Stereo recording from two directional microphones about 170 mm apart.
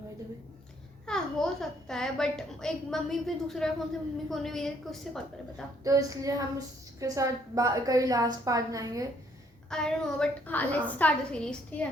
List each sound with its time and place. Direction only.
1.0 s a child's voice: 5° left (ahead or behind)
5.8 s a woman's voice: 20° right (ahead or behind)
9.6 s a woman's voice: 5° left (ahead or behind)